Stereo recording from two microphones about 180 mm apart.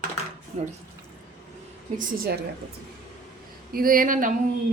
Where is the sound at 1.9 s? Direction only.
55° right (ahead or behind).